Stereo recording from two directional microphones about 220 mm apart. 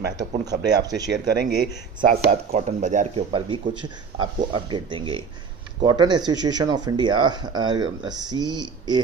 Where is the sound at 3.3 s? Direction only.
20° right (ahead or behind).